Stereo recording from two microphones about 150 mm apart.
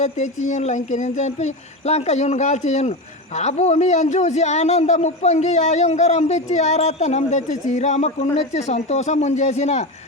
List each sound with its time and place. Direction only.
0.0 s a man's voice: 50° left (ahead or behind)